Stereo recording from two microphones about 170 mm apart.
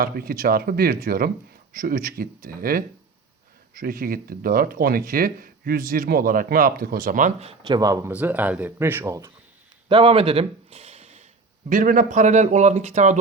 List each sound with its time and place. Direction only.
0.0 s speech: 60° right (ahead or behind); by 7.5 s 45° right (ahead or behind)
7.7 s speech: 20° right (ahead or behind)
9.9 s speech: 30° right (ahead or behind)
11.7 s speech: 50° right (ahead or behind)